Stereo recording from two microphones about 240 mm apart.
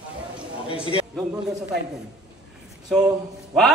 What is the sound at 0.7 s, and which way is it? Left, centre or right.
Speech, left.